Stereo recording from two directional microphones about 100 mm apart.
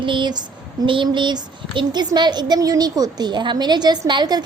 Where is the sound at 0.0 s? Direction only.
55° right (ahead or behind).